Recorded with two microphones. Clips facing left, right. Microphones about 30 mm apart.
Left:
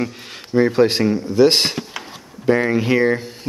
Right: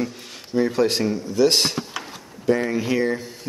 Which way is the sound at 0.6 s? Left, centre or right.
Left.